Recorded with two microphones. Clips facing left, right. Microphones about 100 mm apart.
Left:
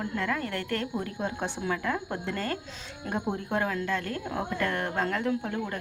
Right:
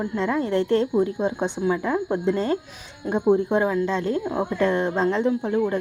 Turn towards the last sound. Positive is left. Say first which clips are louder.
# right 8 dB
turn(degrees=-20)  # may be behind; listen again after turning